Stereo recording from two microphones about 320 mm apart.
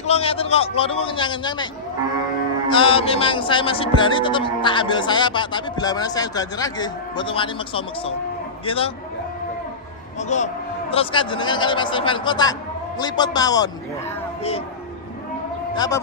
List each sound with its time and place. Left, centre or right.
0.0 s speech: centre
2.7 s speech: centre
10.1 s speech: left
15.7 s a man's voice: centre